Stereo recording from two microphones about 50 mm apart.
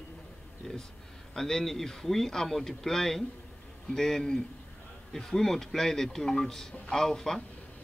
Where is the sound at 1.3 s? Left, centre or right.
Centre.